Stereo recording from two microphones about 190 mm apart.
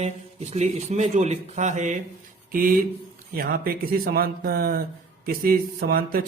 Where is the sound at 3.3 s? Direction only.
50° right (ahead or behind).